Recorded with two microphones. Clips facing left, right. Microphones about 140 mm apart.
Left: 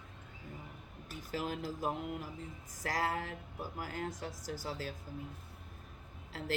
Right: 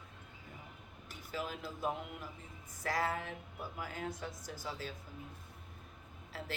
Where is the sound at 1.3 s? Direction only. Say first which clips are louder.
Left 3 dB; 45° left (ahead or behind).